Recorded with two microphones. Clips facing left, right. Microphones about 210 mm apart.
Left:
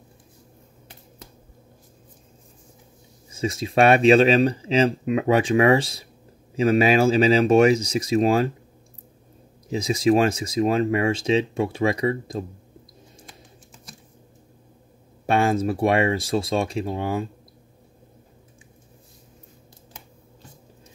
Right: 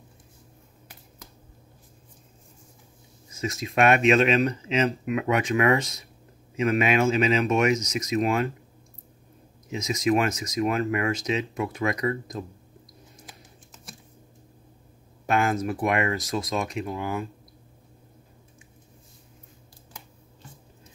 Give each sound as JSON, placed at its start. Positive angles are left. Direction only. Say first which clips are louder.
{"t": 3.3, "sound": "speech", "louder": "left 5 dB", "side_deg": 30}
{"t": 9.7, "sound": "speech", "louder": "left 5 dB", "side_deg": 30}
{"t": 15.2, "sound": "speech", "louder": "left 4 dB", "side_deg": 30}